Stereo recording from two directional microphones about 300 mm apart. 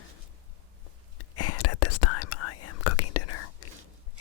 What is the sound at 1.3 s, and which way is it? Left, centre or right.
Whispering, left.